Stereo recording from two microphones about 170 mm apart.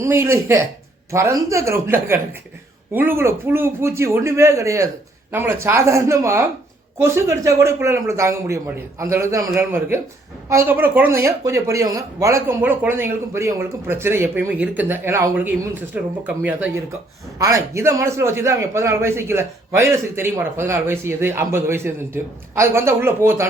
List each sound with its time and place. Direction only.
0.0 s a man's voice: 15° right (ahead or behind)